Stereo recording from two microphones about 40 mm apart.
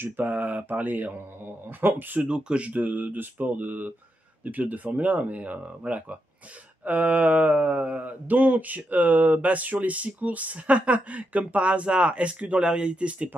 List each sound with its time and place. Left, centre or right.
0.0 s speech: right
2.2 s speech: right
2.8 s speech: right
3.6 s speech: right
4.5 s a sound: right
12.6 s speech: right